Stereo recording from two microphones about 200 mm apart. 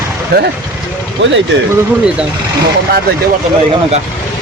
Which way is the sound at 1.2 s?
60° right (ahead or behind).